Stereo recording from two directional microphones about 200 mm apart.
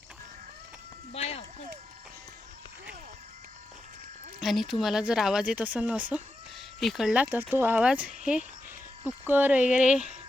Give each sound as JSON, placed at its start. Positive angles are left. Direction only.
{"t": 1.1, "sound": "speech", "side_deg": 30}
{"t": 4.4, "sound": "speech", "side_deg": 0}